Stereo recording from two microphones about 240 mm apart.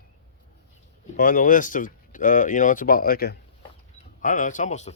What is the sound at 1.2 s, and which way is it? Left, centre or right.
Speech, left.